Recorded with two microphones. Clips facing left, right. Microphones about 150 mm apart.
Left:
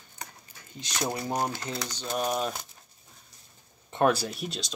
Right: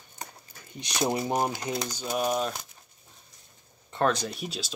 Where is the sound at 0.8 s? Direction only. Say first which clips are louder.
Right 4 dB; 20° right (ahead or behind); by 2.6 s centre (ahead or behind).